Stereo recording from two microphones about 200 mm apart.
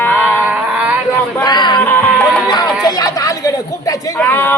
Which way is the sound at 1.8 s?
10° left (ahead or behind).